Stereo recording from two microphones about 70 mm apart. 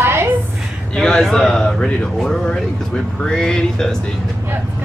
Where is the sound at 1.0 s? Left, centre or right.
Centre.